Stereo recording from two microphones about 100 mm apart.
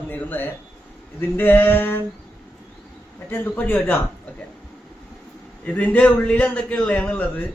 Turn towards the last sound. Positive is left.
turn(degrees=15)  # may be behind; listen again after turning